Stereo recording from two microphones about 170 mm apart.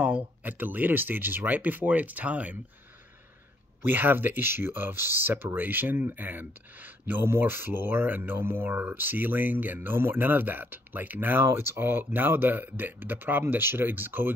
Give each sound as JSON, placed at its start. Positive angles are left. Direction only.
{"t": 0.0, "sound": "speech", "side_deg": -5}
{"t": 3.8, "sound": "speech", "side_deg": -10}